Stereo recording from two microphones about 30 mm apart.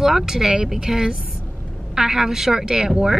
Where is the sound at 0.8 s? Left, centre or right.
Centre.